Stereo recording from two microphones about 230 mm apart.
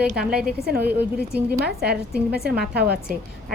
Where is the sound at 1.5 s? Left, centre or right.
Right.